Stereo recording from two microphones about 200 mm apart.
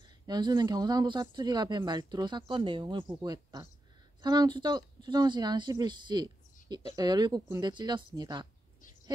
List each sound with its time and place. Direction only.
0.3 s speech: 20° right (ahead or behind)